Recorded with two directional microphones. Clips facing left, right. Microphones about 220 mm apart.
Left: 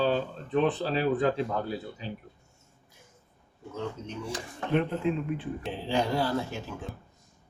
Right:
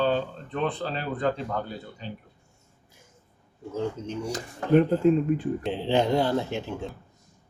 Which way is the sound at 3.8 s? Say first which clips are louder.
Right 5 dB; 30° right (ahead or behind).